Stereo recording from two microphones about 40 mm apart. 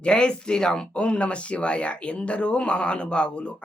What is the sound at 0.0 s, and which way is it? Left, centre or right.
Speech, left.